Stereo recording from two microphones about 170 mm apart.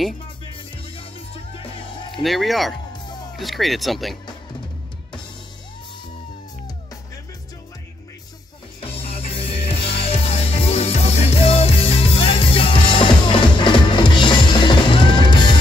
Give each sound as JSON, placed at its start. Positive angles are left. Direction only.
{"t": 0.9, "sound": "music", "side_deg": 35}
{"t": 2.2, "sound": "speech", "side_deg": 0}
{"t": 8.8, "sound": "music", "side_deg": 35}